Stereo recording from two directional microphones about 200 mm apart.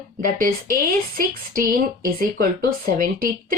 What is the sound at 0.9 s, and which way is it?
Speech, 45° right (ahead or behind).